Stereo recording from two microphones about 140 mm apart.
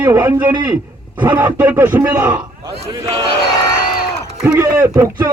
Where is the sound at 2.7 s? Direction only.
25° right (ahead or behind).